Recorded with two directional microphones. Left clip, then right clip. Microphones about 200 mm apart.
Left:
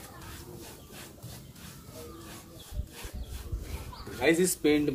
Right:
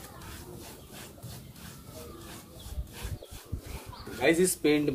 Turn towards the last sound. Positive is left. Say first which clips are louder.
# even
turn(degrees=10)  # may be behind; listen again after turning